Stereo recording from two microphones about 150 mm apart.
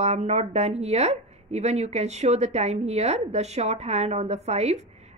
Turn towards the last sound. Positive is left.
turn(degrees=-45)  # may be behind; listen again after turning